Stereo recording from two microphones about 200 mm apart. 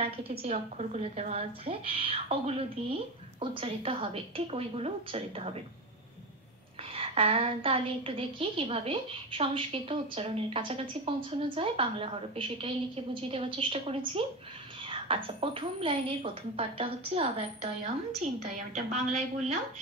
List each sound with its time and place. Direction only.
0.0 s a woman's voice: 30° right (ahead or behind)
6.9 s a woman's voice: 30° right (ahead or behind)